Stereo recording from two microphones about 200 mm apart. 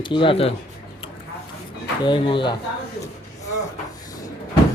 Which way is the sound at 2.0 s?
25° left (ahead or behind).